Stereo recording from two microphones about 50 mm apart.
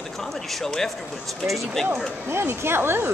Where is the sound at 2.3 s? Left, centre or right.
Right.